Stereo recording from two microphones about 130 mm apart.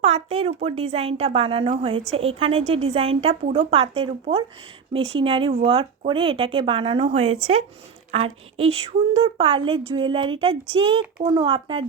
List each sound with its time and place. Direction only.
0.0 s a woman's voice: 50° right (ahead or behind)